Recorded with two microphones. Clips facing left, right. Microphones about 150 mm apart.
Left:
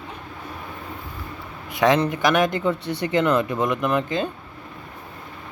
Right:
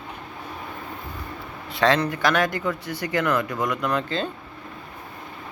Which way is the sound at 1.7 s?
15° left (ahead or behind).